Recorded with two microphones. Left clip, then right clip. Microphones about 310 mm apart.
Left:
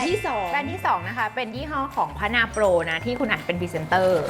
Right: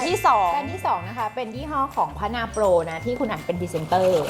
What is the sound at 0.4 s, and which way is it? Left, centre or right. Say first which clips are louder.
Speech: right 1 dB; centre.